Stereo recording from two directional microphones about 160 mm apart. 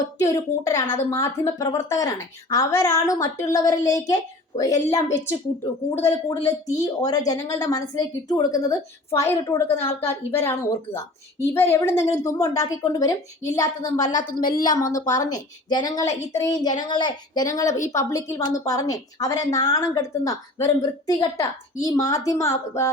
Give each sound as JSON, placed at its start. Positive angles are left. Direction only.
{"t": 0.2, "sound": "a woman's voice", "side_deg": 20}
{"t": 14.1, "sound": "a woman's voice", "side_deg": 50}
{"t": 14.6, "sound": "a woman's voice", "side_deg": 25}